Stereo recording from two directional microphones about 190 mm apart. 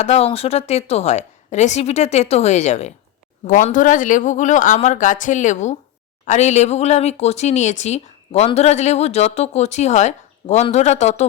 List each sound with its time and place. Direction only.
0.0 s speech: 35° left (ahead or behind)